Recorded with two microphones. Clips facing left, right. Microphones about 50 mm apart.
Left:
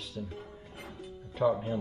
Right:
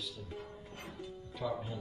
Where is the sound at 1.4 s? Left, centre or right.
Left.